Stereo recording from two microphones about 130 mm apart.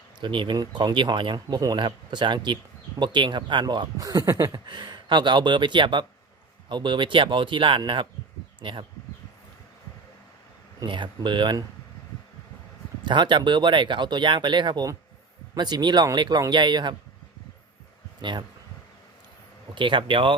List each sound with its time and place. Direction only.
0.2 s speech: 40° right (ahead or behind)
10.8 s speech: 40° right (ahead or behind)
13.1 s speech: 35° right (ahead or behind)
18.2 s speech: 35° right (ahead or behind)
19.7 s speech: 40° right (ahead or behind)